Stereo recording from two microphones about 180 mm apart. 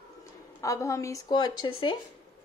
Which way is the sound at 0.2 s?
15° left (ahead or behind).